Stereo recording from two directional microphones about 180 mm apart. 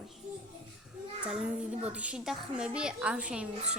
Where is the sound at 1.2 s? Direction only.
5° right (ahead or behind).